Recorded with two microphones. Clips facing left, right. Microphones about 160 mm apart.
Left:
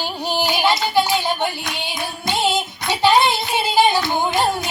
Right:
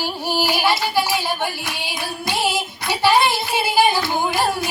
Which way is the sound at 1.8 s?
20° left (ahead or behind).